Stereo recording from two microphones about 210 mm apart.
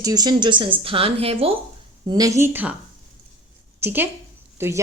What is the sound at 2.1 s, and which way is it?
Speech, 15° right (ahead or behind).